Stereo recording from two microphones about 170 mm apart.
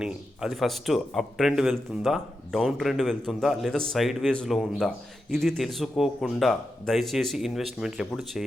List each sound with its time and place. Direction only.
0.0 s speech: 5° right (ahead or behind)